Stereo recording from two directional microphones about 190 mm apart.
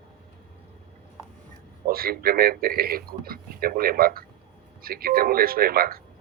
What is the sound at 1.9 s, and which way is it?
A man's voice, 50° right (ahead or behind).